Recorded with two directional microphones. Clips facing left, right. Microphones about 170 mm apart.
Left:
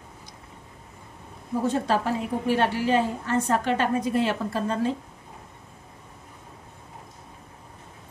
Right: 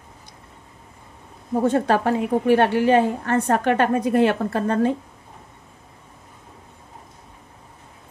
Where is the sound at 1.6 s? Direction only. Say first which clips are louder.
Right 5 dB; 60° right (ahead or behind).